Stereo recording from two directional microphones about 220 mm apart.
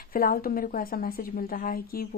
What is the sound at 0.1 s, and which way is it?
A woman's voice, 40° left (ahead or behind).